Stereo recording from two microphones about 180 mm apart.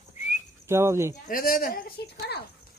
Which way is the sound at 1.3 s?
50° left (ahead or behind).